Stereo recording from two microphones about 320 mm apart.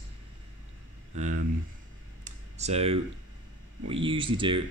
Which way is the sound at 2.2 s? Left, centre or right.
Centre.